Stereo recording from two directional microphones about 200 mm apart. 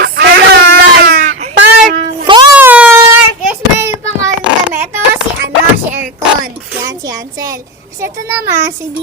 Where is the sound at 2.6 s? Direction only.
10° right (ahead or behind).